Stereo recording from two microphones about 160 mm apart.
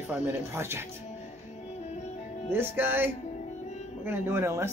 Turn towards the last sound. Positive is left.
turn(degrees=-15)  # may be behind; listen again after turning